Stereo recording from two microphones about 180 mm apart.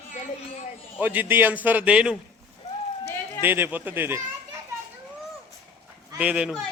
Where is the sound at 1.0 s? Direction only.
10° right (ahead or behind).